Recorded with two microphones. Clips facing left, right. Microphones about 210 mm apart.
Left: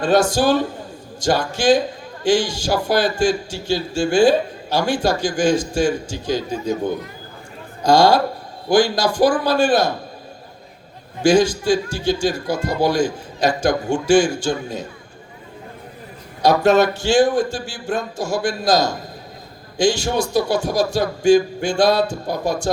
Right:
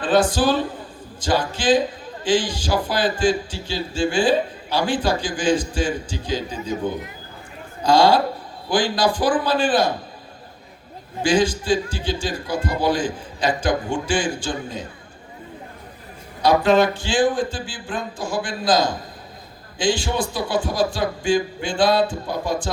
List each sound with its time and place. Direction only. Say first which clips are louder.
0.0 s a man's voice: left 2 dB; 45° left (ahead or behind)
7.9 s a man's voice: left 2 dB; 45° left (ahead or behind)
11.2 s a man's voice: left 4 dB; 45° left (ahead or behind)
16.4 s a man's voice: left 2 dB; 45° left (ahead or behind)